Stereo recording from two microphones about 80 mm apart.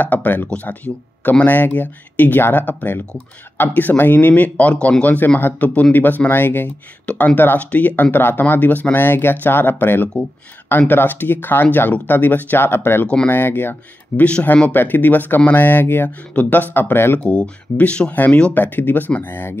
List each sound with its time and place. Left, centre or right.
0.0 s speech: left
13.0 s speech: centre
13.3 s speech: left
17.2 s speech: centre